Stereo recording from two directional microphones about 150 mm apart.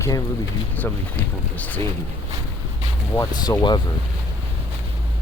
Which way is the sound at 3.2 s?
25° left (ahead or behind).